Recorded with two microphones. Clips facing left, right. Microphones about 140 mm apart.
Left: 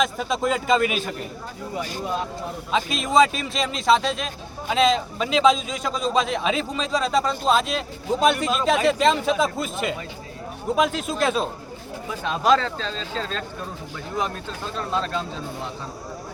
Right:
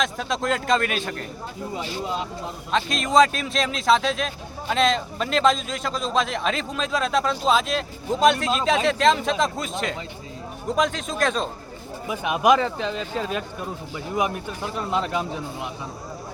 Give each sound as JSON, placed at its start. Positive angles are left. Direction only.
{"t": 0.0, "sound": "a man's voice", "side_deg": 5}
{"t": 2.7, "sound": "a man's voice", "side_deg": 5}
{"t": 12.0, "sound": "speech", "side_deg": -15}